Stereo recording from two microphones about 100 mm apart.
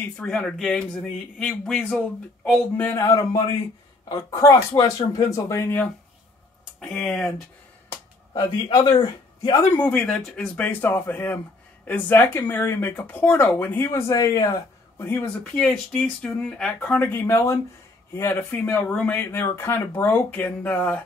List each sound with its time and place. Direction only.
0.2 s speech: 5° left (ahead or behind)
2.8 s speech: 30° left (ahead or behind)
6.8 s speech: 5° left (ahead or behind)
8.3 s a man's voice: 50° left (ahead or behind)
9.6 s speech: 20° left (ahead or behind)
9.9 s speech: 5° left (ahead or behind); by 15.0 s 40° left (ahead or behind)
15.0 s speech: 20° left (ahead or behind)
15.5 s speech: 5° left (ahead or behind)
17.1 s speech: 25° left (ahead or behind)
18.9 s speech: 10° left (ahead or behind)
19.1 s speech: 20° left (ahead or behind)